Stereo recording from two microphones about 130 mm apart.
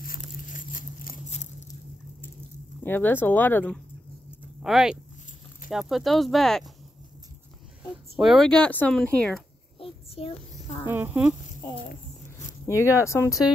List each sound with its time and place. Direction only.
0.5 s patter: 90° left
2.8 s speech: 15° left (ahead or behind)
4.6 s speech: 5° right (ahead or behind)
7.9 s speech: centre (ahead or behind)
10.1 s a child's voice: 50° left (ahead or behind)
10.9 s speech: 15° right (ahead or behind)
11.9 s a sound: 80° left
12.6 s speech: 20° left (ahead or behind)